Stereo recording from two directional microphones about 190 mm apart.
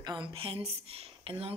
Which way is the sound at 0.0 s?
25° right (ahead or behind).